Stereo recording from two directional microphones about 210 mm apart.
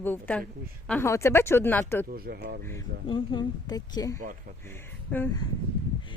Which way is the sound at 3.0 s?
20° left (ahead or behind).